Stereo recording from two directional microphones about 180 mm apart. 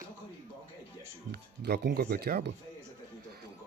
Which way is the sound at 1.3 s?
65° right (ahead or behind).